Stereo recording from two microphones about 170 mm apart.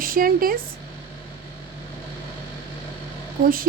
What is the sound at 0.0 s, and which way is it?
Speech, 55° right (ahead or behind).